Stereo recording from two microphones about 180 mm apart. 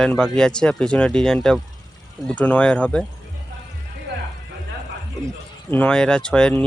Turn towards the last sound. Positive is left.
turn(degrees=5)  # may be behind; listen again after turning